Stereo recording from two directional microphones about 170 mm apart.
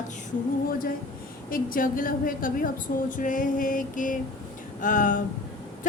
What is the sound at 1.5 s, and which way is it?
A woman's voice, 55° left (ahead or behind).